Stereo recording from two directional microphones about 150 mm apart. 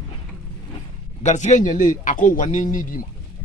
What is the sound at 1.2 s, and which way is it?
A man's voice, 50° left (ahead or behind).